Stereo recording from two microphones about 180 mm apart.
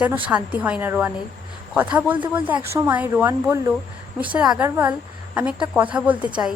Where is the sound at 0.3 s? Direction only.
10° right (ahead or behind).